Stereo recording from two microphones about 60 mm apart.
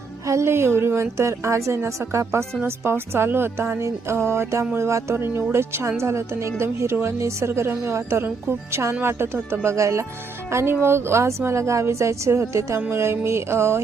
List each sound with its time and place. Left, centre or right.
0.3 s a woman's voice: right
2.6 s a woman's voice: right
5.1 s a woman's voice: right
9.6 s a woman's voice: right